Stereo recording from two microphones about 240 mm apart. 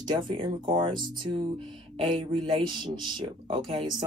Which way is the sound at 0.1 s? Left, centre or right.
Centre.